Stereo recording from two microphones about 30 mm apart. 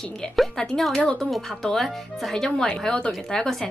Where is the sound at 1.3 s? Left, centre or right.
Centre.